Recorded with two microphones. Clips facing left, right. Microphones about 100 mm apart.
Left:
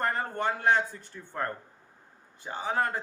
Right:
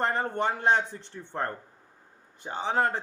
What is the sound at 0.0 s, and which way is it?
A man's voice, 25° right (ahead or behind).